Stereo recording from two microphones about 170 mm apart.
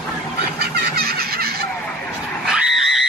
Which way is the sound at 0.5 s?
70° right (ahead or behind).